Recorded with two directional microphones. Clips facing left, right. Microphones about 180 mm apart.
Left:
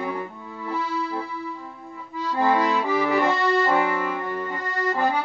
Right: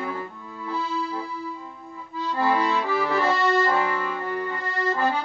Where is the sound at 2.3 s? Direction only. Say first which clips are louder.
Left 2 dB; 15° left (ahead or behind).